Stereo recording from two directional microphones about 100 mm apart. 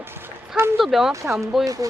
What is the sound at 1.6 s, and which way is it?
Speech, 35° right (ahead or behind).